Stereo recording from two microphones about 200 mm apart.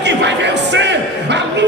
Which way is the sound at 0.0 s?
60° right (ahead or behind).